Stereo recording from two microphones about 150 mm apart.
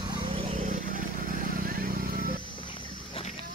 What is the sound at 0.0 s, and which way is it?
Vehicle, 30° right (ahead or behind).